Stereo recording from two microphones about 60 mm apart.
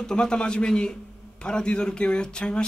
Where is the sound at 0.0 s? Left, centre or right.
Centre.